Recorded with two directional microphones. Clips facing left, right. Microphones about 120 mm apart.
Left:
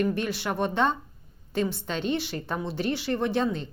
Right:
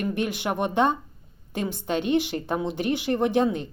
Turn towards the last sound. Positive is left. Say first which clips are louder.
# right 4 dB
turn(degrees=-15)  # may be behind; listen again after turning